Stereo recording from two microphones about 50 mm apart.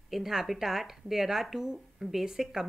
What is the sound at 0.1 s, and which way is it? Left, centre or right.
Speech, centre.